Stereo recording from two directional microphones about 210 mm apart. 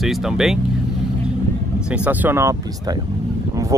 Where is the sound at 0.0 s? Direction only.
Centre (ahead or behind).